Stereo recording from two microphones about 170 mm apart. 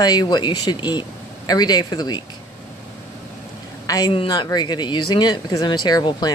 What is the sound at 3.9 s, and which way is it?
A woman's voice, 20° left (ahead or behind).